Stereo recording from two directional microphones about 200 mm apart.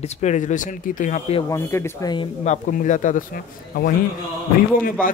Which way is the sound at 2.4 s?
40° left (ahead or behind).